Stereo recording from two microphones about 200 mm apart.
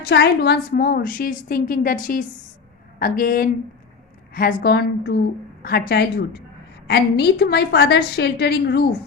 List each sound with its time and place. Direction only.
0.0 s a woman's voice: 55° left (ahead or behind)